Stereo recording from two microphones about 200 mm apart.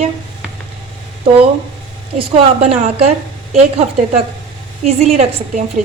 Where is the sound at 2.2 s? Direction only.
30° right (ahead or behind).